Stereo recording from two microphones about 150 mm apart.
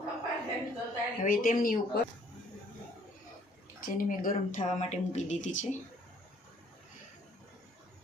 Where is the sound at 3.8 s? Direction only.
65° left (ahead or behind); by 5.6 s 50° left (ahead or behind).